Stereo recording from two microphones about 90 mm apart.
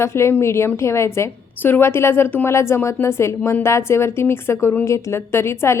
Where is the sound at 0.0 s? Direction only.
30° left (ahead or behind).